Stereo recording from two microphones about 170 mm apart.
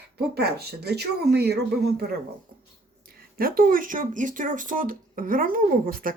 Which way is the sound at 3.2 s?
60° right (ahead or behind).